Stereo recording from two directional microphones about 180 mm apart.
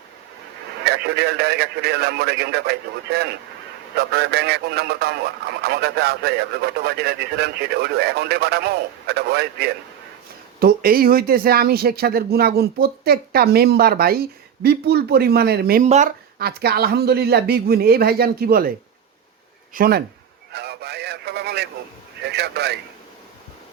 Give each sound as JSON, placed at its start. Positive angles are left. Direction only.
{"t": 0.9, "sound": "speech", "side_deg": -65}
{"t": 15.8, "sound": "speech", "side_deg": -40}
{"t": 16.4, "sound": "speech", "side_deg": -60}
{"t": 19.7, "sound": "speech", "side_deg": -55}
{"t": 20.5, "sound": "speech", "side_deg": -65}